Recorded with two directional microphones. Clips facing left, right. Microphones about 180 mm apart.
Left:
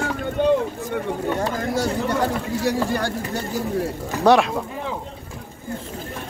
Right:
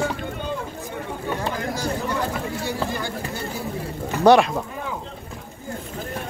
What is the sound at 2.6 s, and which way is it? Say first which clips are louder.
Speech: left 8 dB; 90° left.